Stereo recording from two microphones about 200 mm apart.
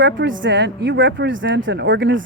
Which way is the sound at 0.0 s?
65° right (ahead or behind).